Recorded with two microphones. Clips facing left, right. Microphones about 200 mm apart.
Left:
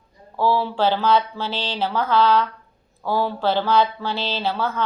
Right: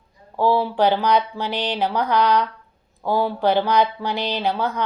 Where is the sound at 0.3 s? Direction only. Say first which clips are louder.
Right 2 dB; 15° right (ahead or behind).